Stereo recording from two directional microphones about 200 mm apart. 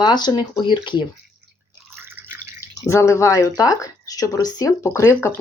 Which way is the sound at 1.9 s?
10° right (ahead or behind).